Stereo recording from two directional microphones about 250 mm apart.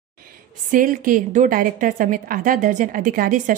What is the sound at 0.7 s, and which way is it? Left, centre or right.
A woman's voice, right.